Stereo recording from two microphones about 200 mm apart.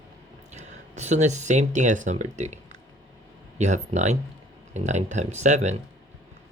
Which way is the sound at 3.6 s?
35° right (ahead or behind).